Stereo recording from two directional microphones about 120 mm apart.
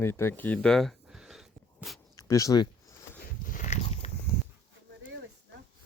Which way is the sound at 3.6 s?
75° left (ahead or behind).